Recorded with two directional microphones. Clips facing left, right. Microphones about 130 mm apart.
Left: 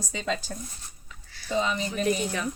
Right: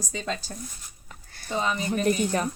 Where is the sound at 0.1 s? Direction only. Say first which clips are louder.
Left 2 dB; 40° right (ahead or behind).